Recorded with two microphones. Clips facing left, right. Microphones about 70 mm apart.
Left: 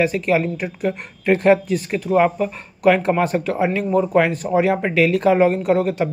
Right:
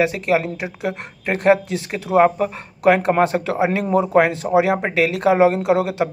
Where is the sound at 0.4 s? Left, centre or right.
Centre.